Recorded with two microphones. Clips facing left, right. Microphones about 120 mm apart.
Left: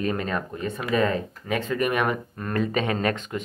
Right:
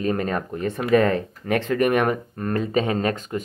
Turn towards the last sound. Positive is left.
turn(degrees=-35)  # may be behind; listen again after turning